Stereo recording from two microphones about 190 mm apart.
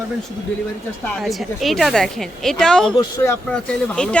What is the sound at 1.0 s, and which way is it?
Speech, centre (ahead or behind).